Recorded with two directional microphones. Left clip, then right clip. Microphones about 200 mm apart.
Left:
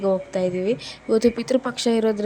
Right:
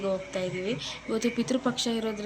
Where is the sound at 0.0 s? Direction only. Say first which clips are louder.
Left 8 dB; 30° left (ahead or behind).